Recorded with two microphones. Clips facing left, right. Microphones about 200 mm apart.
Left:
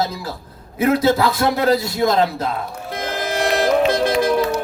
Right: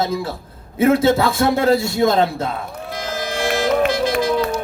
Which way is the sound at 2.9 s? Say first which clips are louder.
Left 2 dB; 55° left (ahead or behind).